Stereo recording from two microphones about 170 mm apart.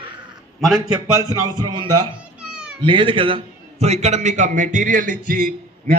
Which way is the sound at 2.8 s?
30° right (ahead or behind).